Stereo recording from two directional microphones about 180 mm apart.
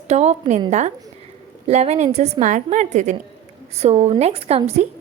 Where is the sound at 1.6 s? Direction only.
35° right (ahead or behind).